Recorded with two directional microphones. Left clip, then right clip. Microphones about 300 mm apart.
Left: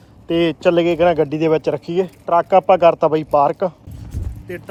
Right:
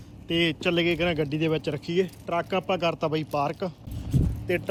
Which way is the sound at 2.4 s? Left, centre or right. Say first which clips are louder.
Left 14 dB; left.